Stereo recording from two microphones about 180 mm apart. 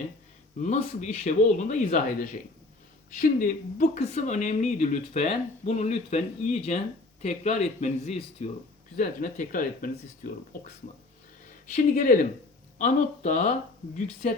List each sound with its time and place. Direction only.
0.6 s speech: 40° left (ahead or behind)
3.2 s speech: 50° left (ahead or behind)
11.7 s speech: 45° left (ahead or behind)